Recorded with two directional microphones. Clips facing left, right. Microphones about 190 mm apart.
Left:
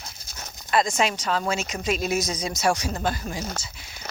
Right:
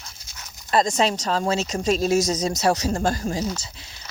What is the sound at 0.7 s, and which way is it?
Speech, 35° right (ahead or behind).